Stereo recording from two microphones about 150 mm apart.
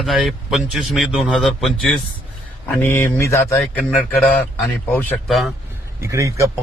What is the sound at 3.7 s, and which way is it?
Speech, 5° left (ahead or behind).